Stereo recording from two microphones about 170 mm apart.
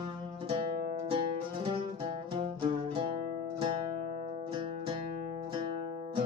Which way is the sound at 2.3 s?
30° right (ahead or behind).